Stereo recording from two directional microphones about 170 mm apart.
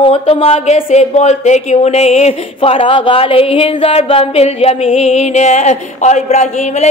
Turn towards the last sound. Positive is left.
turn(degrees=40)  # may be behind; listen again after turning